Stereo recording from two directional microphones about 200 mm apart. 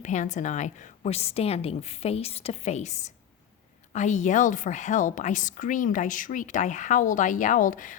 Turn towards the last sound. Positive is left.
turn(degrees=40)  # may be behind; listen again after turning